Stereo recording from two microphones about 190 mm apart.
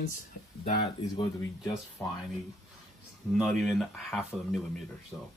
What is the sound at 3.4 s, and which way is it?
Speech, centre (ahead or behind).